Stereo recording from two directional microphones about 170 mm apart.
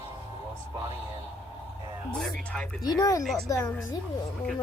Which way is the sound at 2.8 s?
20° left (ahead or behind).